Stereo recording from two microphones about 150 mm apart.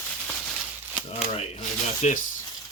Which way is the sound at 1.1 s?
40° left (ahead or behind).